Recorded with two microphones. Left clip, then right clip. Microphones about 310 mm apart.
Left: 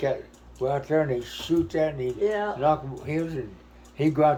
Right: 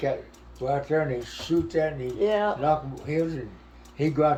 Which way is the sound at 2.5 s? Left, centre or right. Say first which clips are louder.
Left 1 dB; centre.